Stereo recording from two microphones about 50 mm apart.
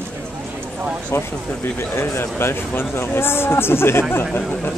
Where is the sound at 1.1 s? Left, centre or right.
Left.